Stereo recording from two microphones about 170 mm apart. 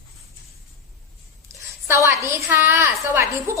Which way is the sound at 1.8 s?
15° right (ahead or behind).